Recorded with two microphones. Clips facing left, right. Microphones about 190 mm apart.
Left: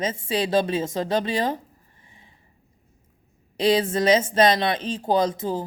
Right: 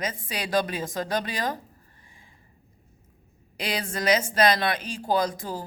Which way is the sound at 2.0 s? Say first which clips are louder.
Left 5 dB; 25° left (ahead or behind).